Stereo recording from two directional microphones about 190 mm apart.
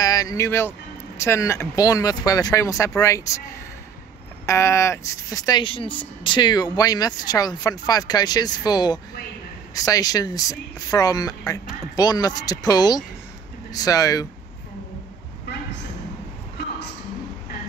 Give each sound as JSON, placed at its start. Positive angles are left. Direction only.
{"t": 0.0, "sound": "speech", "side_deg": 20}
{"t": 4.5, "sound": "speech", "side_deg": 15}